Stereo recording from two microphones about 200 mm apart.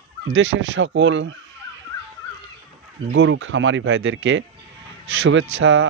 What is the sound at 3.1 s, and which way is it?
Speech, 70° right (ahead or behind).